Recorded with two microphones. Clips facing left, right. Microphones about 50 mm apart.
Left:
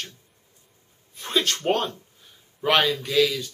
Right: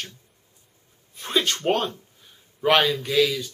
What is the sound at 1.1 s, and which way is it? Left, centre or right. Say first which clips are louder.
Speech: right 1 dB; centre.